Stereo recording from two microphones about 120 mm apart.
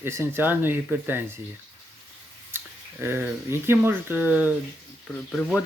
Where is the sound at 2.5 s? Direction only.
20° right (ahead or behind).